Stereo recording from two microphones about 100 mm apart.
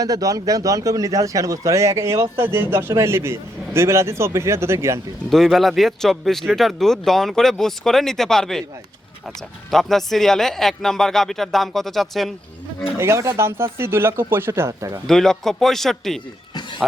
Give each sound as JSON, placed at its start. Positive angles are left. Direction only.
{"t": 0.0, "sound": "a man's voice", "side_deg": -35}
{"t": 5.3, "sound": "speech", "side_deg": 0}
{"t": 9.6, "sound": "speech", "side_deg": 0}
{"t": 13.0, "sound": "a man's voice", "side_deg": -30}
{"t": 15.0, "sound": "speech", "side_deg": 5}